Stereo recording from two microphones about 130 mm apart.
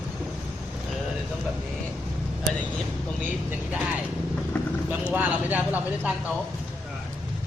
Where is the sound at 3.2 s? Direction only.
10° right (ahead or behind).